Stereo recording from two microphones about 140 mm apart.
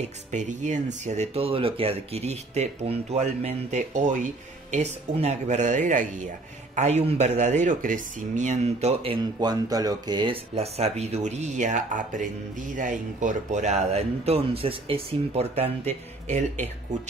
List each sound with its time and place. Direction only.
0.0 s speech: 60° right (ahead or behind)